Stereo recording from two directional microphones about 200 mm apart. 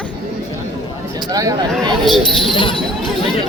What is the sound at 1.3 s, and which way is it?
Speech, 15° right (ahead or behind).